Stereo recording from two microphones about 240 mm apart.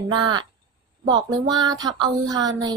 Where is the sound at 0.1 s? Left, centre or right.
Centre.